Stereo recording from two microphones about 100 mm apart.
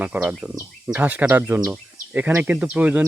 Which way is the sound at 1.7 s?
15° right (ahead or behind).